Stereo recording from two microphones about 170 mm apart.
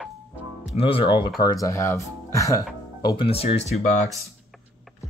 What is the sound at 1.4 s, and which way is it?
Speech, 20° left (ahead or behind).